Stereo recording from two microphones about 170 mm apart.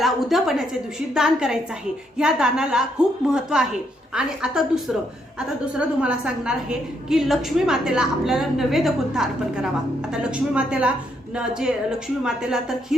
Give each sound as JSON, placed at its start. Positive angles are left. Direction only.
{"t": 0.0, "sound": "a woman's voice", "side_deg": 0}